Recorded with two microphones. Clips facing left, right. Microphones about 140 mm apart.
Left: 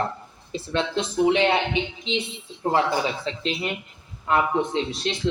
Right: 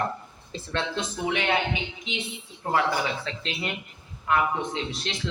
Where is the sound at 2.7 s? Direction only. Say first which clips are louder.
Left 2 dB; 25° left (ahead or behind).